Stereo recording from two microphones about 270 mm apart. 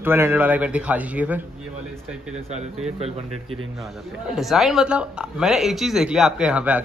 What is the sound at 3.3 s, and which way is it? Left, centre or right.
Speech, right.